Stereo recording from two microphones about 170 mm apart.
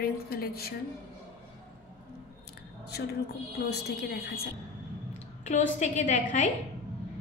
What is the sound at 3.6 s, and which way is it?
Speech, 70° left (ahead or behind).